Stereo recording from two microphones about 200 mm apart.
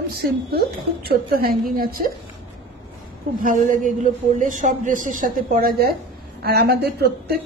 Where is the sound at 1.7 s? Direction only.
45° right (ahead or behind).